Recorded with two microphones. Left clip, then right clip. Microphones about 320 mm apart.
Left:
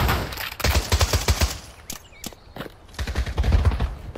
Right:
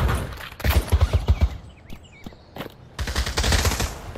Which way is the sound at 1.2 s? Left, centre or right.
Left.